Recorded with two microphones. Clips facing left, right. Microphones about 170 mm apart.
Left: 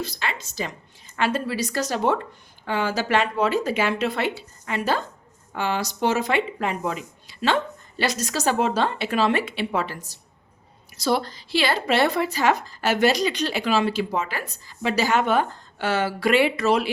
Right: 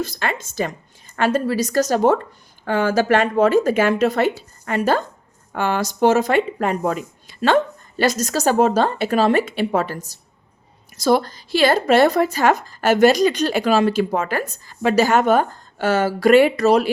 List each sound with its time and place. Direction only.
0.0 s a woman's voice: 50° right (ahead or behind)